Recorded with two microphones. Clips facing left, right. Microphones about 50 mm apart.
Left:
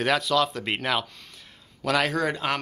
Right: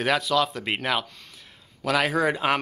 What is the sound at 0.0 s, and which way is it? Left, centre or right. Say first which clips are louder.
Speech: even; centre.